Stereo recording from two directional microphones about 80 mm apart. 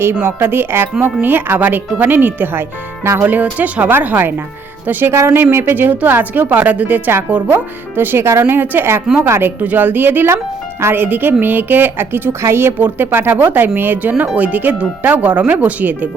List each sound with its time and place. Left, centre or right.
0.0 s speech: right